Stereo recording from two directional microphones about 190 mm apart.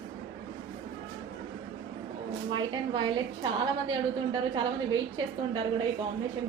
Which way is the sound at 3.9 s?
25° right (ahead or behind).